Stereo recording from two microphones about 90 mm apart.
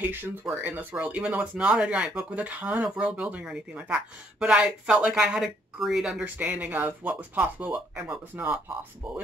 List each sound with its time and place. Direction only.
0.0 s speech: 25° right (ahead or behind); by 6.2 s 5° right (ahead or behind)
6.2 s speech: 15° right (ahead or behind)